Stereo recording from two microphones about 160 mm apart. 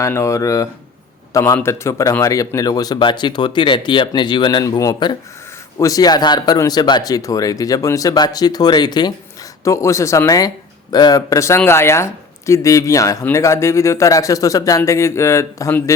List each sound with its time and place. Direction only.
0.0 s a man's voice: 20° left (ahead or behind)